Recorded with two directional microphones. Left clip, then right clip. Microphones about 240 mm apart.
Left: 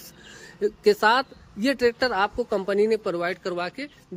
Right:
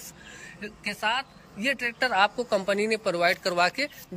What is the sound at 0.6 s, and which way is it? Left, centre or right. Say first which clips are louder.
A man's voice: left 13 dB; left.